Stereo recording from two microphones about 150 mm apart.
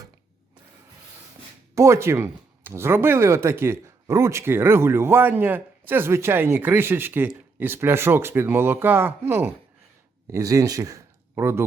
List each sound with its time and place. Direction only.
1.7 s speech: 20° right (ahead or behind)